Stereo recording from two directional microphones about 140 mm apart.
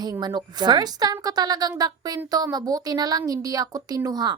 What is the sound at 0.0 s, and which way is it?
Speech, 30° right (ahead or behind).